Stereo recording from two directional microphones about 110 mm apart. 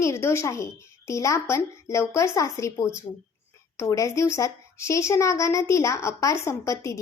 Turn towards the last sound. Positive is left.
turn(degrees=30)  # may be behind; listen again after turning